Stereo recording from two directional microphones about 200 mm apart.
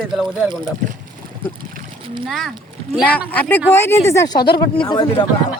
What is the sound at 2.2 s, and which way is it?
Speech, centre (ahead or behind).